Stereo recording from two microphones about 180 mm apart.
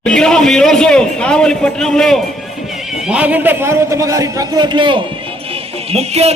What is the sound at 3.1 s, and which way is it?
A man's voice, 5° right (ahead or behind).